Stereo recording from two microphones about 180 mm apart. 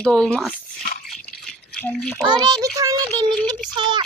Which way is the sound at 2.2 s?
25° right (ahead or behind).